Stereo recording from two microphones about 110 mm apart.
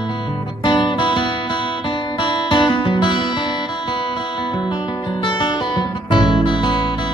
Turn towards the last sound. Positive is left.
turn(degrees=45)  # may be behind; listen again after turning